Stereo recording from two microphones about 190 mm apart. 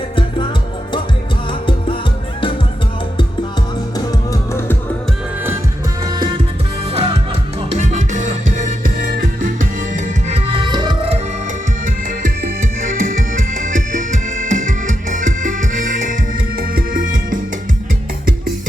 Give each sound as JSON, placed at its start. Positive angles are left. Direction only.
{"t": 3.9, "sound": "music", "side_deg": 20}
{"t": 6.1, "sound": "music", "side_deg": -25}
{"t": 11.9, "sound": "music", "side_deg": -45}